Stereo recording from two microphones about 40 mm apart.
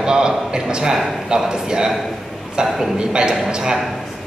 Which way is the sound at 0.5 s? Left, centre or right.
Centre.